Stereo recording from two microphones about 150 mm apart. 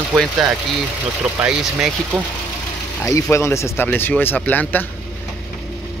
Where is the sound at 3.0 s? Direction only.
20° left (ahead or behind).